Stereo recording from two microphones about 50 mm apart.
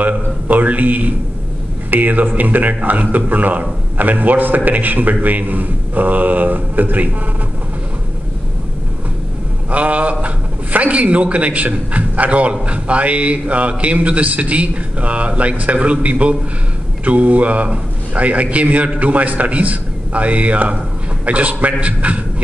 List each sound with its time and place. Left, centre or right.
0.0 s a man's voice: right
9.7 s a man's voice: right